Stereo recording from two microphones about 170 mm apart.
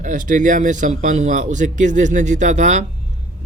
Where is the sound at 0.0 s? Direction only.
50° right (ahead or behind).